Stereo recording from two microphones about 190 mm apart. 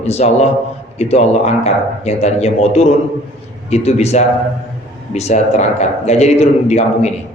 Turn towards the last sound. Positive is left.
turn(degrees=35)  # may be behind; listen again after turning